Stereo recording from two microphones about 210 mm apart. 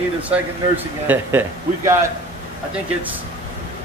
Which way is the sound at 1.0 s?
10° right (ahead or behind).